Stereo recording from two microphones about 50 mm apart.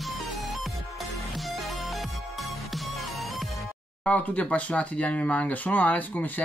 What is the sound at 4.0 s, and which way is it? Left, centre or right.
Speech, left.